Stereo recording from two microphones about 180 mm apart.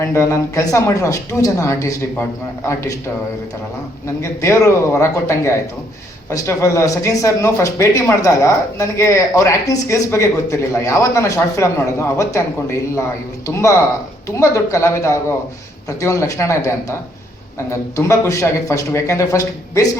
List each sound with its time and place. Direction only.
0.0 s speech: 15° left (ahead or behind)
4.0 s speech: 15° left (ahead or behind)
14.3 s speech: 15° left (ahead or behind)